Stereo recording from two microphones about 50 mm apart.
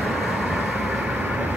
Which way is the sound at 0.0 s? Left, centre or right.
Centre.